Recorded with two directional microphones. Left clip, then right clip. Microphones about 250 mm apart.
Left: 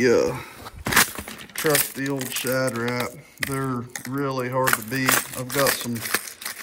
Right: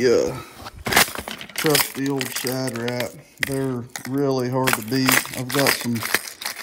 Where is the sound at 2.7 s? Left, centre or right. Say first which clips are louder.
Even; centre.